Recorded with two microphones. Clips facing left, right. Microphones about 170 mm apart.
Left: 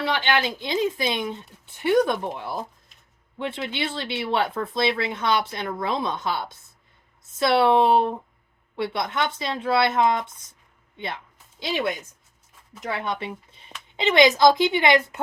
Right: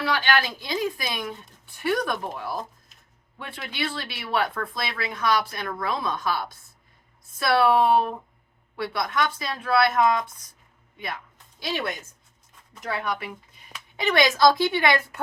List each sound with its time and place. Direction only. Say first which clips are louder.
0.0 s speech: left 1 dB; 20° left (ahead or behind)